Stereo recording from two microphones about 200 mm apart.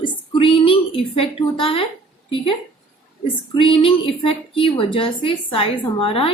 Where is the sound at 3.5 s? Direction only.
25° left (ahead or behind).